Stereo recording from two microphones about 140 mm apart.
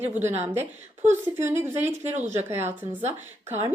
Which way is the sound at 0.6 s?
20° right (ahead or behind).